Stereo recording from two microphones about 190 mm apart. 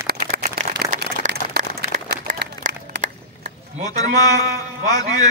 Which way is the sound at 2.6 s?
40° right (ahead or behind).